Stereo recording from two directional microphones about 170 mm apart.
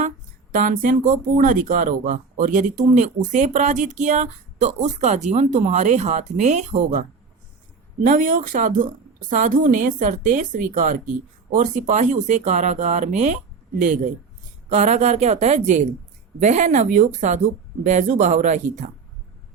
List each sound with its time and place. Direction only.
0.5 s speech: 50° right (ahead or behind)
8.0 s a woman's voice: 50° right (ahead or behind)